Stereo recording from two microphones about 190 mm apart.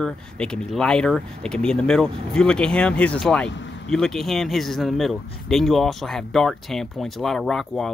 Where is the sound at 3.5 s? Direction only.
70° left (ahead or behind).